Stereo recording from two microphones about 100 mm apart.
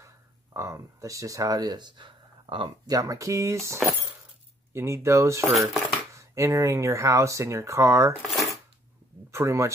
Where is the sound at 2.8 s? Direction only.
35° right (ahead or behind).